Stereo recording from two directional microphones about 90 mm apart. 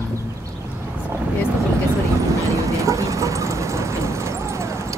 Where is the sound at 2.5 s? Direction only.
35° right (ahead or behind).